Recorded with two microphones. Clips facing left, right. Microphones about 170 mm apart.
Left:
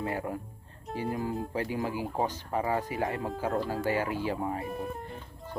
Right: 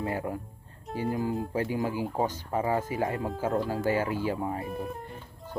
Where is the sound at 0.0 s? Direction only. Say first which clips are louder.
Right 1 dB; 25° right (ahead or behind).